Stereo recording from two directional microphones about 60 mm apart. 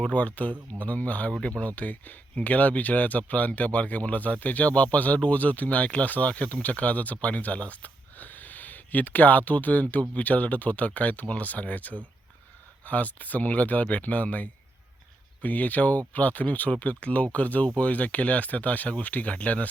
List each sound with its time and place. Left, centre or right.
0.0 s speech: left